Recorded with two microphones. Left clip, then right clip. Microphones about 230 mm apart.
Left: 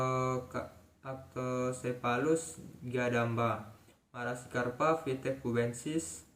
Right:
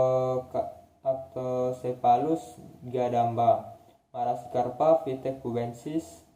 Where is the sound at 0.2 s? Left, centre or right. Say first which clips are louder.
Right 7 dB; left.